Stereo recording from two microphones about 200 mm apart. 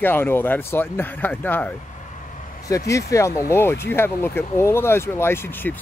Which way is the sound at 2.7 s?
15° left (ahead or behind).